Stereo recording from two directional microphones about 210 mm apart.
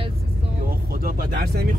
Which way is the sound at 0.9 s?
45° right (ahead or behind).